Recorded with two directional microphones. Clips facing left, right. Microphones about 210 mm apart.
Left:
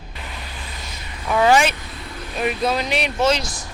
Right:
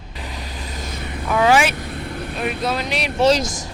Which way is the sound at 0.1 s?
35° right (ahead or behind).